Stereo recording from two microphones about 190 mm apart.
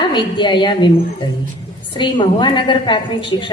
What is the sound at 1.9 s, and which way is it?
A woman's voice, 25° left (ahead or behind).